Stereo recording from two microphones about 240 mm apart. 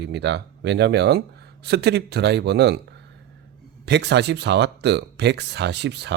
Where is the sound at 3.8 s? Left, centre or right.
Right.